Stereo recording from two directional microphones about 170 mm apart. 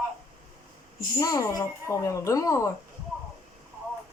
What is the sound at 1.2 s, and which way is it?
Speech, 20° left (ahead or behind).